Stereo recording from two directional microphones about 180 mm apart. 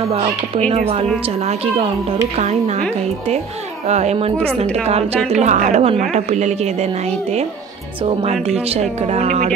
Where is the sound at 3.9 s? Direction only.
35° right (ahead or behind).